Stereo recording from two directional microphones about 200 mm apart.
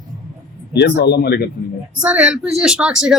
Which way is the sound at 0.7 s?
55° left (ahead or behind).